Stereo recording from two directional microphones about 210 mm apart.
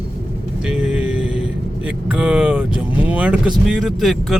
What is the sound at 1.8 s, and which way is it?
Speech, 5° right (ahead or behind).